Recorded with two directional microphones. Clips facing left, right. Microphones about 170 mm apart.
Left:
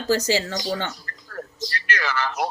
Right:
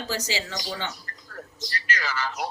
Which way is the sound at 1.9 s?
60° left (ahead or behind).